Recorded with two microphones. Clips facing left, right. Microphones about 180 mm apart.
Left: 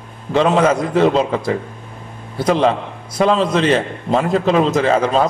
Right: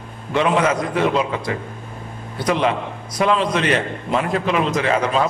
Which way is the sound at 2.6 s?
35° left (ahead or behind).